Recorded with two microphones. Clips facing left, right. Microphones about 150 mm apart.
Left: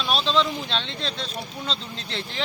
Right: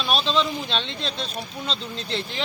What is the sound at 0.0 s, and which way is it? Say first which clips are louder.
Speech: even; 10° right (ahead or behind).